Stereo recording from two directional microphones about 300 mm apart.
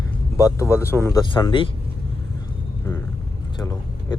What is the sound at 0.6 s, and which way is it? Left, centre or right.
Speech, centre.